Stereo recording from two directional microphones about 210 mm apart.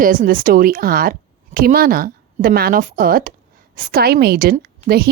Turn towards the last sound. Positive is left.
turn(degrees=-45)  # may be behind; listen again after turning